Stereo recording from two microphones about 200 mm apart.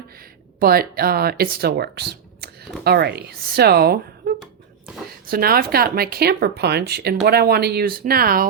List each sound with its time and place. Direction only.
0.6 s speech: 50° right (ahead or behind)
5.3 s speech: 45° right (ahead or behind)